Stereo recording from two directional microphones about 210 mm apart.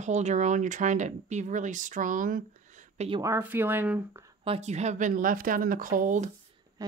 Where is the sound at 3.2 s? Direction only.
10° right (ahead or behind).